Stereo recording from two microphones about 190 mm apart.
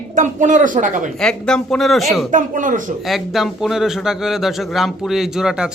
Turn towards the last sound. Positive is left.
turn(degrees=-5)  # may be behind; listen again after turning